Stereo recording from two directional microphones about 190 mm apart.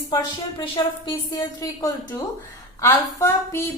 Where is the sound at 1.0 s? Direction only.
20° left (ahead or behind).